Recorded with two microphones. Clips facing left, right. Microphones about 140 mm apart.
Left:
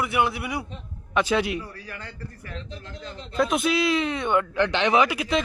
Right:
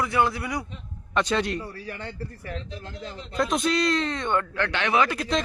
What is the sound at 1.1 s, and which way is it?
Speech, 5° left (ahead or behind).